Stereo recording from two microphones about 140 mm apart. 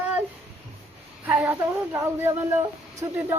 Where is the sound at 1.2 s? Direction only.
10° right (ahead or behind).